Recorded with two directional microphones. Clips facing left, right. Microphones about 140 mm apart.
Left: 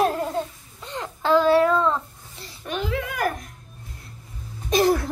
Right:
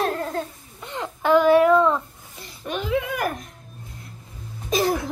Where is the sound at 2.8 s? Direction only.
15° right (ahead or behind).